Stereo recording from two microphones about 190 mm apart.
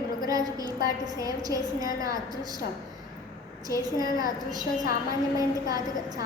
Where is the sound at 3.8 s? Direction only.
20° right (ahead or behind).